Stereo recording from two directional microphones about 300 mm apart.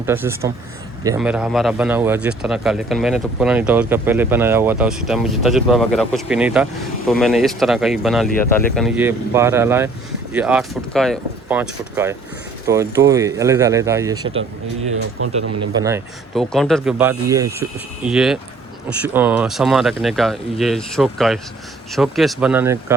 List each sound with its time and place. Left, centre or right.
0.0 s speech: centre
15.2 s speech: right
16.3 s speech: centre